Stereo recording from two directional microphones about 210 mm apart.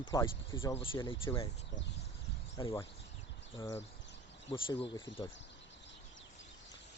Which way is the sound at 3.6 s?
10° left (ahead or behind).